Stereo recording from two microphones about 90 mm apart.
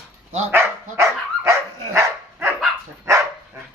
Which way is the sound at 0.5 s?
35° right (ahead or behind).